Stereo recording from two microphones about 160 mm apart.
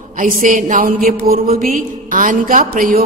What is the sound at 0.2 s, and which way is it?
Mantra, 55° right (ahead or behind).